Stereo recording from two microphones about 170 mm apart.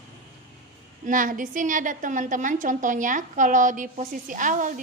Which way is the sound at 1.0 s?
50° right (ahead or behind).